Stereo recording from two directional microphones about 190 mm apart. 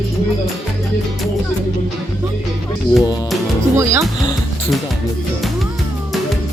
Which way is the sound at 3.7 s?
15° right (ahead or behind).